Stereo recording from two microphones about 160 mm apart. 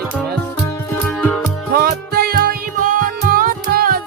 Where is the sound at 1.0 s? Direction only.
5° left (ahead or behind).